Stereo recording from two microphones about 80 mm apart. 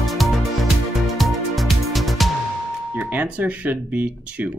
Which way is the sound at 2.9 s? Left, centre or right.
Right.